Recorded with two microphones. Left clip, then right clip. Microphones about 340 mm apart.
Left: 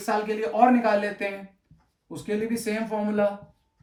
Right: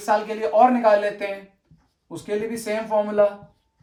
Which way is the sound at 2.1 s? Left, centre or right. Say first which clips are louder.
Right 2 dB; centre.